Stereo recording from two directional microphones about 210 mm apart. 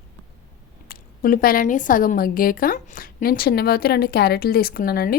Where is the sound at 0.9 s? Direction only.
45° left (ahead or behind).